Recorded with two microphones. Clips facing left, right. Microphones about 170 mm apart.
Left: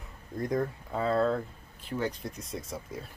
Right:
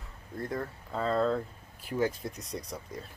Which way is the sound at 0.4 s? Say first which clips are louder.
Left 5 dB; 15° left (ahead or behind).